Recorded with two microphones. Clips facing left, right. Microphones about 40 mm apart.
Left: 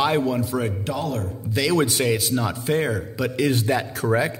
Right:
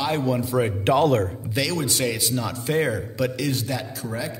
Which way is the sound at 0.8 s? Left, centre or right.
Right.